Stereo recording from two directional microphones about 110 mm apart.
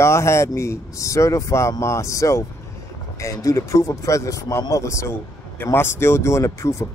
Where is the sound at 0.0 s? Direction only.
25° left (ahead or behind).